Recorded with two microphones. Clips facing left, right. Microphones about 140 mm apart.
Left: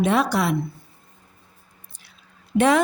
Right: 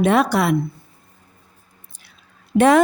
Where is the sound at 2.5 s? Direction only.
35° right (ahead or behind).